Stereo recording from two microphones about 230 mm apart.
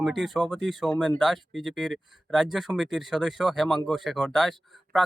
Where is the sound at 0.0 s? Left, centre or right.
Centre.